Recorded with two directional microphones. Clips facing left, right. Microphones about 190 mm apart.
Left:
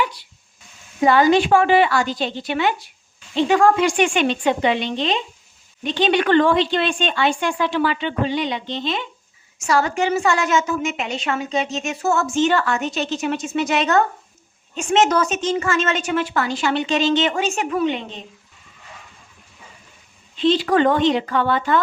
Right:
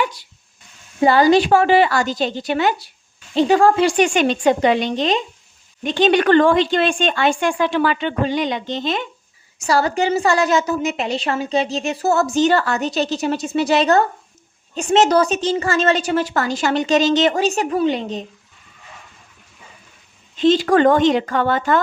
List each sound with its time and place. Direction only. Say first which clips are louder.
0.0 s dog: right 1 dB; 45° right (ahead or behind)
1.0 s a woman's voice: right 2 dB; 35° right (ahead or behind)
9.6 s a woman's voice: right 2 dB; 35° right (ahead or behind)
20.4 s a woman's voice: right 3 dB; 45° right (ahead or behind)